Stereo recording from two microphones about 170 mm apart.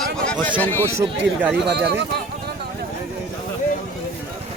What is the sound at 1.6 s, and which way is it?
Speech, 75° right (ahead or behind).